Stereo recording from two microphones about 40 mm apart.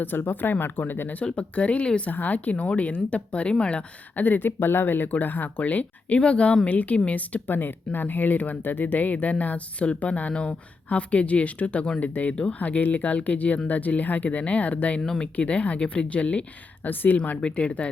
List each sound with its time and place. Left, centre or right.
0.0 s speech: left
1.2 s speech: left
2.0 s speech: left
4.2 s speech: left
6.1 s speech: left
7.4 s speech: left
16.8 s speech: left
17.5 s speech: left